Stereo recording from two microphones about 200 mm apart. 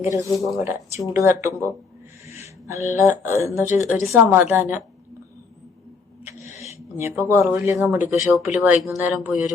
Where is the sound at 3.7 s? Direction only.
35° left (ahead or behind).